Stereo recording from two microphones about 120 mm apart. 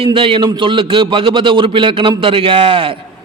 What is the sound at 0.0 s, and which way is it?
A man's voice, 45° right (ahead or behind).